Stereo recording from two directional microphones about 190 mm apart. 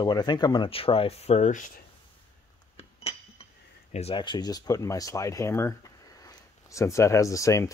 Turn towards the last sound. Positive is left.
turn(degrees=15)  # may be behind; listen again after turning